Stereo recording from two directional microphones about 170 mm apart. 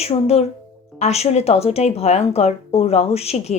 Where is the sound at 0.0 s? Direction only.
35° left (ahead or behind).